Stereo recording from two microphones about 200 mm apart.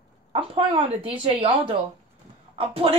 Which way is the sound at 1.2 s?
30° right (ahead or behind).